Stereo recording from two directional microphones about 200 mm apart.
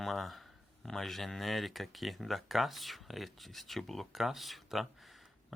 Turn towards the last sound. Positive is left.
turn(degrees=0)  # may be behind; listen again after turning